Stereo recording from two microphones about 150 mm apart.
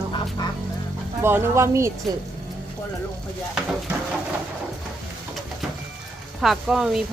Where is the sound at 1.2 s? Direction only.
15° right (ahead or behind).